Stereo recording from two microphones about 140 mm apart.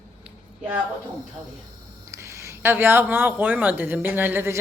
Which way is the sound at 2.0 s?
20° right (ahead or behind).